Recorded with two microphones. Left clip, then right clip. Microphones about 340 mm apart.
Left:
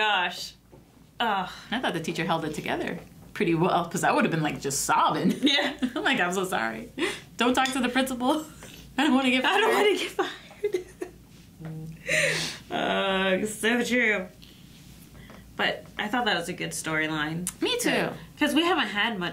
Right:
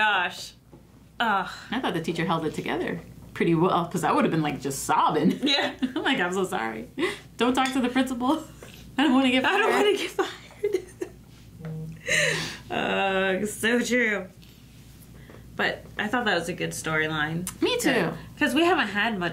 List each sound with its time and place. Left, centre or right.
0.0 s a sound: right
1.1 s speech: right
1.7 s a woman's voice: left
9.4 s speech: right
12.0 s gasp: right
12.6 s speech: right
15.5 s speech: right
17.5 s a woman's voice: left
18.4 s speech: right